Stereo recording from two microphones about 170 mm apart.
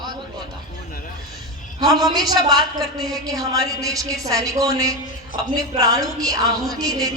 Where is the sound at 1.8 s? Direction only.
25° right (ahead or behind).